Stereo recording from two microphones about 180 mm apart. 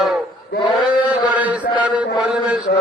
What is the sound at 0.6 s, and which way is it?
Chant, centre (ahead or behind).